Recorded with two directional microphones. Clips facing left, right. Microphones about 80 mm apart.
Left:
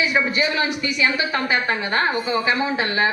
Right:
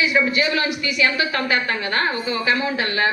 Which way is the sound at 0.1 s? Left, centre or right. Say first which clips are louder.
Right 1 dB; left.